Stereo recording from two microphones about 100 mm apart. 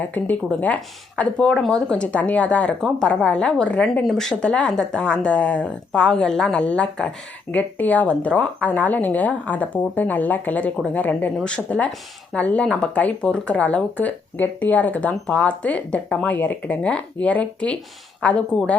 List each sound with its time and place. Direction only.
0.0 s speech: 15° left (ahead or behind)